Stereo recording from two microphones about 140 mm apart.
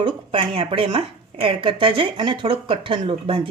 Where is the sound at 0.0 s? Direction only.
35° right (ahead or behind).